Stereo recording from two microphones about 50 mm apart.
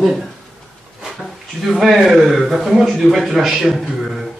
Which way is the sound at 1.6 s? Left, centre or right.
Centre.